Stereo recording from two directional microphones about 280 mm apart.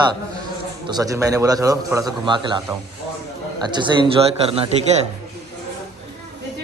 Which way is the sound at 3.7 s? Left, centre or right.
Centre.